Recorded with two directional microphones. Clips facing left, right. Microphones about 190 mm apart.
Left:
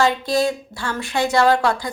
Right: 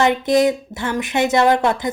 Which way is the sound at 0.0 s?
20° right (ahead or behind).